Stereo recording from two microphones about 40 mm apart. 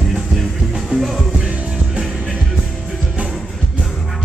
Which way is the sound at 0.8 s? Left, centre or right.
Centre.